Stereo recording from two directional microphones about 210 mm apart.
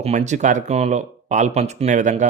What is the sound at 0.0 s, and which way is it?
Speech, 35° right (ahead or behind).